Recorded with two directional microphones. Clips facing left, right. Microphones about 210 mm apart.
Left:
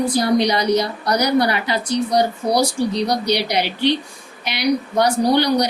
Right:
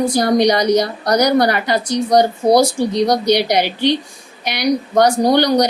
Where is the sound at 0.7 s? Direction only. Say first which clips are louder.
Right 4 dB; 45° right (ahead or behind).